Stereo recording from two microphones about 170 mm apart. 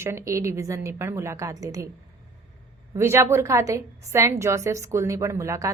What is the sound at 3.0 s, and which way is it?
A woman's voice, 15° right (ahead or behind).